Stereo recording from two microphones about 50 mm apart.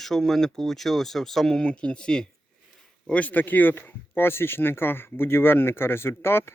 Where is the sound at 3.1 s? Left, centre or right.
Left.